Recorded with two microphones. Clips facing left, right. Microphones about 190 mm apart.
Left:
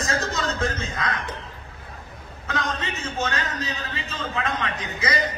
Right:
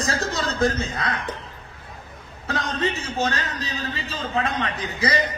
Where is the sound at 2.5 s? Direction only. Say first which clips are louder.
Right 4 dB; 35° right (ahead or behind).